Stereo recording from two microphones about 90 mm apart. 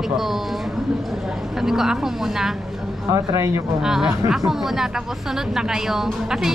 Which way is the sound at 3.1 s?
35° right (ahead or behind).